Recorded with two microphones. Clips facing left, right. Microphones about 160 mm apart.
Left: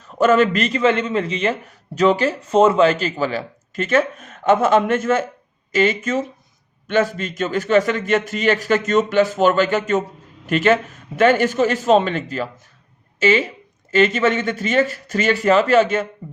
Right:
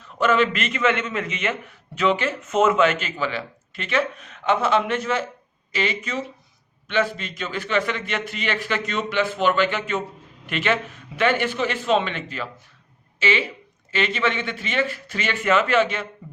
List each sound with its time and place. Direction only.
0.0 s a man's voice: 40° left (ahead or behind)